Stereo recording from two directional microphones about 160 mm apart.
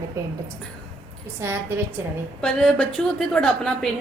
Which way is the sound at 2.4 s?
5° left (ahead or behind).